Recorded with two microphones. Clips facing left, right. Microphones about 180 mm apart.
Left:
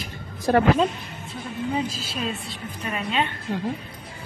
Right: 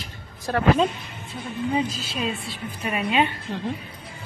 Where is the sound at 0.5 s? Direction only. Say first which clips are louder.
Left 6 dB; 15° left (ahead or behind).